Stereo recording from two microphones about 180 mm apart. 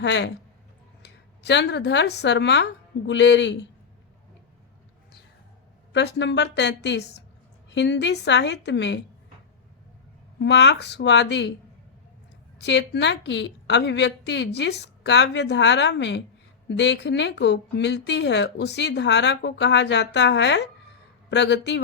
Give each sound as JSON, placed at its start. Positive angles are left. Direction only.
{"t": 0.0, "sound": "speech", "side_deg": 75}
{"t": 5.9, "sound": "speech", "side_deg": 75}
{"t": 10.4, "sound": "speech", "side_deg": 75}
{"t": 12.5, "sound": "speech", "side_deg": 70}